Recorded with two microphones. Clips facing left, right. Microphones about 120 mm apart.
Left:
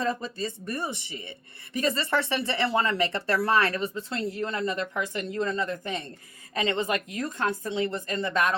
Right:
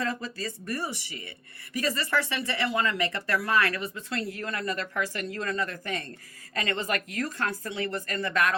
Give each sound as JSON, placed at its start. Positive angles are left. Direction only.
{"t": 0.0, "sound": "speech", "side_deg": 20}